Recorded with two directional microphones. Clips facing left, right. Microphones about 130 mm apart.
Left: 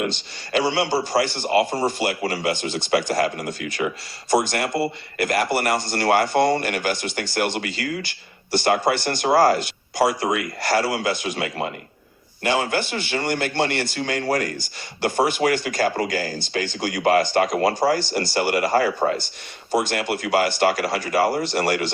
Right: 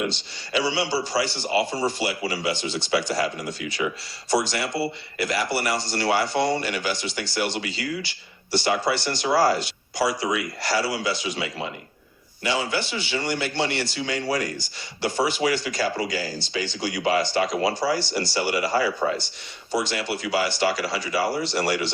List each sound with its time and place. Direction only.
0.0 s a man's voice: 50° left (ahead or behind)